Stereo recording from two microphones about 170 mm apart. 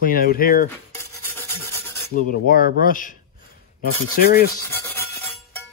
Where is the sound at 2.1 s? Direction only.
55° left (ahead or behind).